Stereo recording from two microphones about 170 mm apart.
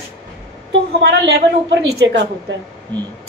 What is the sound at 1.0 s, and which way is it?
Speech, 85° right.